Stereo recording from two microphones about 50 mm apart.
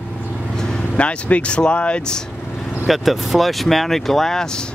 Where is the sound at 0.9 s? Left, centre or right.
Left.